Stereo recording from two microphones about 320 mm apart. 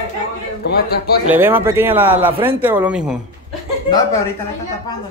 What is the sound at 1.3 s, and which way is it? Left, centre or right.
Speech, centre.